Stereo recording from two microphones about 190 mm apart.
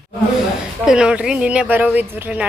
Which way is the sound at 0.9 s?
5° right (ahead or behind).